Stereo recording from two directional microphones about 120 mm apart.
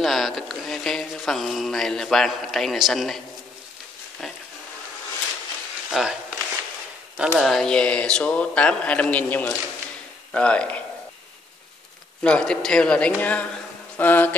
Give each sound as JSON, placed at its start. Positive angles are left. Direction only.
{"t": 0.0, "sound": "speech", "side_deg": 0}
{"t": 5.9, "sound": "a sound", "side_deg": -5}
{"t": 7.2, "sound": "speech", "side_deg": 0}
{"t": 12.2, "sound": "speech", "side_deg": 10}